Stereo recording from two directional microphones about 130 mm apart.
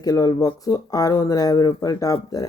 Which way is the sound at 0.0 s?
30° left (ahead or behind).